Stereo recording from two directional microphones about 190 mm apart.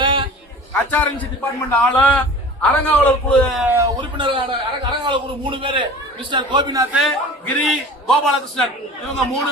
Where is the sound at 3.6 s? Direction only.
15° right (ahead or behind).